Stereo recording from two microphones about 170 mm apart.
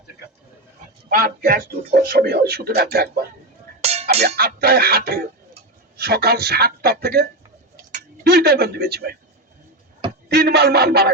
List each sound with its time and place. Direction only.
1.1 s speech: 60° right (ahead or behind)
3.8 s music: 40° right (ahead or behind)
4.4 s speech: 65° right (ahead or behind)
10.2 s speech: 75° right (ahead or behind)